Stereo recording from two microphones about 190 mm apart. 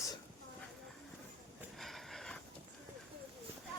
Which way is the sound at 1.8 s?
Centre (ahead or behind).